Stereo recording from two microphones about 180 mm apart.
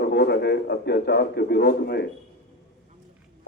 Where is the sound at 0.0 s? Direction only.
65° left (ahead or behind).